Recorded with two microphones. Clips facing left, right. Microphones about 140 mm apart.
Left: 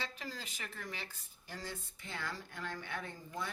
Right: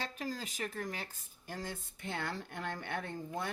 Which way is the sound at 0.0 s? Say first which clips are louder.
Right 5 dB; 45° right (ahead or behind).